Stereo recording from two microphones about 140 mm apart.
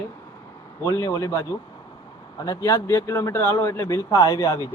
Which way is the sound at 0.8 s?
25° left (ahead or behind).